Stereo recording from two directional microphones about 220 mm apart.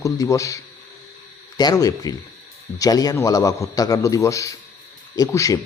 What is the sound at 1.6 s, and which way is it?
Speech, 15° left (ahead or behind).